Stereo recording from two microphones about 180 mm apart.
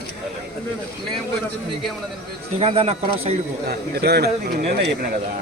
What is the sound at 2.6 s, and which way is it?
Speech, 35° right (ahead or behind).